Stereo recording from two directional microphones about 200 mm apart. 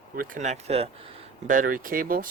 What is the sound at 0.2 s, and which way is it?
Speech, 35° right (ahead or behind).